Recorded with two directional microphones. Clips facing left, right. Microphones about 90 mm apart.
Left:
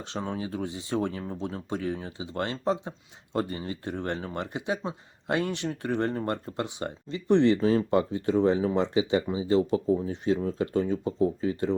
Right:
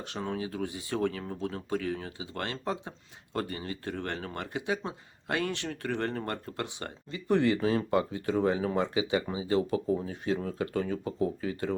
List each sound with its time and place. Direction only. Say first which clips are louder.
0.0 s speech: left 2 dB; 25° left (ahead or behind)